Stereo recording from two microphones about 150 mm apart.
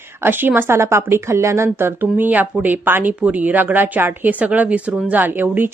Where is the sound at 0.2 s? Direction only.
15° right (ahead or behind).